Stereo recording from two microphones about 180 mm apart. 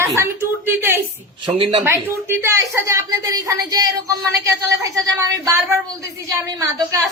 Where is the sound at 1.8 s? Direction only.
15° right (ahead or behind).